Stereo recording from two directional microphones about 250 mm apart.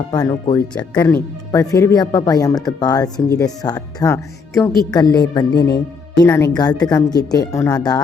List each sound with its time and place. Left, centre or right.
0.1 s speech: centre